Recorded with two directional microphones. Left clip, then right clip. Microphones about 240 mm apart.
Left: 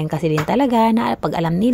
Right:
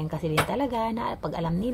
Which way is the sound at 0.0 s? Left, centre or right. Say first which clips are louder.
Left 6 dB; left.